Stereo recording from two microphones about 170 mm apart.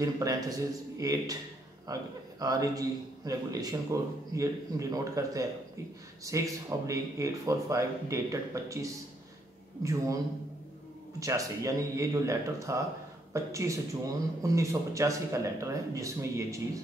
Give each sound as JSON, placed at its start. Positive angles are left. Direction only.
{"t": 0.0, "sound": "speech", "side_deg": -20}
{"t": 11.1, "sound": "speech", "side_deg": -20}